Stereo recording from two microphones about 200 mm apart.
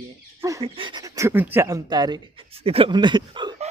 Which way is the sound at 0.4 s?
15° right (ahead or behind).